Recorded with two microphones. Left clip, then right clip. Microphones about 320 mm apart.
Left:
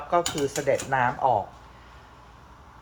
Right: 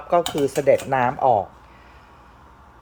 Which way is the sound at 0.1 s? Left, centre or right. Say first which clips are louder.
Right 5 dB; right.